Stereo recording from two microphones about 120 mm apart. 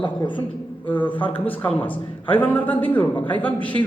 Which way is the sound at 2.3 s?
15° left (ahead or behind).